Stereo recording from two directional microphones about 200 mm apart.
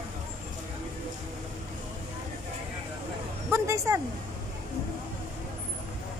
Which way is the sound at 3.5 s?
15° right (ahead or behind).